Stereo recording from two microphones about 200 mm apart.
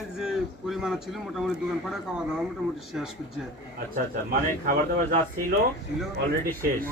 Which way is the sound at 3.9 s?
45° right (ahead or behind).